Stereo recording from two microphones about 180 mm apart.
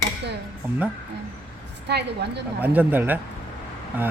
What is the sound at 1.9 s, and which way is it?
Speech, 65° right (ahead or behind).